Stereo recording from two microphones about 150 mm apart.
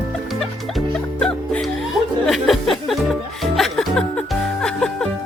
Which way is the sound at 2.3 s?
Centre (ahead or behind).